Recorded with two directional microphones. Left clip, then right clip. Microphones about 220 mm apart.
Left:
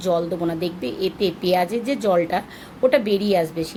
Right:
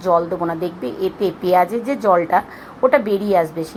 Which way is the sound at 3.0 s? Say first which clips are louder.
Right 3 dB; 20° right (ahead or behind).